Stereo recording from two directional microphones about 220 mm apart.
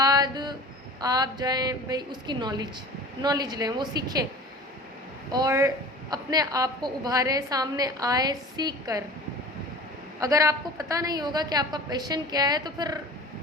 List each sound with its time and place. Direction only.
0.0 s a sound: 15° right (ahead or behind)
1.0 s a woman's voice: 20° right (ahead or behind)
5.3 s a woman's voice: 15° right (ahead or behind)
10.2 s a woman's voice: 15° right (ahead or behind)